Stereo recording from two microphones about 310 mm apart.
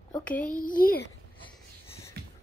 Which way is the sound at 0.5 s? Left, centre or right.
Left.